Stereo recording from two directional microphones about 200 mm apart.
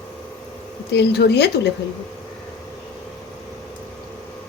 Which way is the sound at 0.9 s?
55° left (ahead or behind).